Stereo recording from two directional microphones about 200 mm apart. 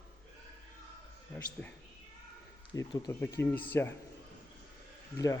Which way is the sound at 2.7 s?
15° left (ahead or behind).